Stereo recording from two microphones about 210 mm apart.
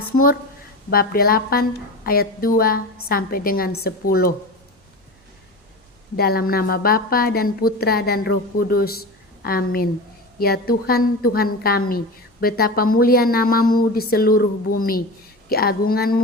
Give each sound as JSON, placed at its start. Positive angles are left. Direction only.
{"t": 0.9, "sound": "a woman's voice", "side_deg": 45}
{"t": 6.1, "sound": "a woman's voice", "side_deg": 45}